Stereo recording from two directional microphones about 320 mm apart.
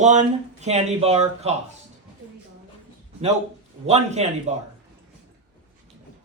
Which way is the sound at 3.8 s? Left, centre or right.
Centre.